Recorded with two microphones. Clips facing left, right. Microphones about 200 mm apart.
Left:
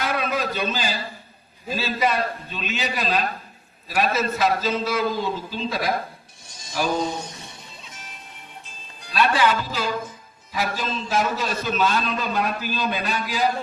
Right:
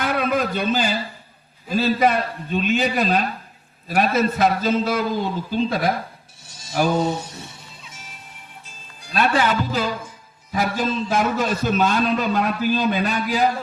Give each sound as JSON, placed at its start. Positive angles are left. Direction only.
{"t": 0.0, "sound": "a sound", "side_deg": -50}
{"t": 1.7, "sound": "a man's voice", "side_deg": -55}
{"t": 7.0, "sound": "speech", "side_deg": -5}
{"t": 7.9, "sound": "music", "side_deg": -10}
{"t": 9.1, "sound": "a man's voice", "side_deg": -50}